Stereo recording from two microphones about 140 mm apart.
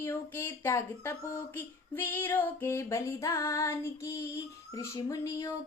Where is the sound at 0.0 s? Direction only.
15° left (ahead or behind).